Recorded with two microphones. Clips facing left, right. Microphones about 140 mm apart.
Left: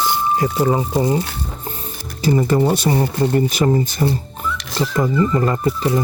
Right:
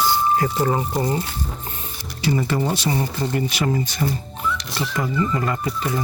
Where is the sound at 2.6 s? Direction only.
55° left (ahead or behind).